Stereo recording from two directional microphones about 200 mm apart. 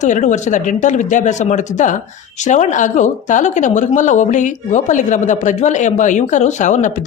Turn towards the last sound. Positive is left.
turn(degrees=40)  # may be behind; listen again after turning